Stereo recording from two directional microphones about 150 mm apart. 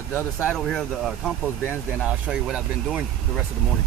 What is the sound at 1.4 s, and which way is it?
Speech, 15° left (ahead or behind).